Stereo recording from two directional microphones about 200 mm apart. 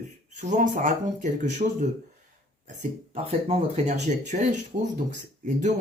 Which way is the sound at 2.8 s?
30° right (ahead or behind).